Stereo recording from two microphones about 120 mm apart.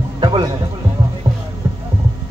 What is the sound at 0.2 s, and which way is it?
Music, 40° right (ahead or behind).